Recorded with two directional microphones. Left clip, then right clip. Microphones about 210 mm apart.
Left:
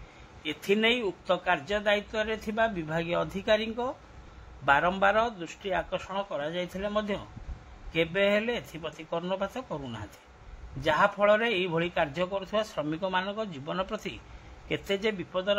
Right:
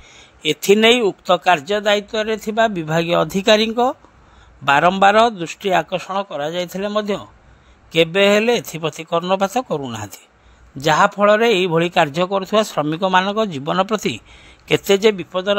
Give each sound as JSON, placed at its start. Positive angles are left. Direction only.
{"t": 0.4, "sound": "speech", "side_deg": -55}